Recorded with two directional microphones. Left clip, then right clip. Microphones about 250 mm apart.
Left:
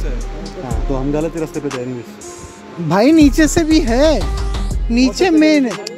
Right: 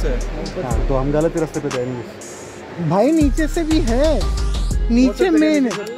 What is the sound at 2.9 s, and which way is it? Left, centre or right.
Speech, left.